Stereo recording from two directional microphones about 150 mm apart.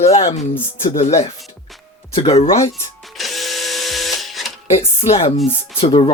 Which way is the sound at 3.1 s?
Centre (ahead or behind).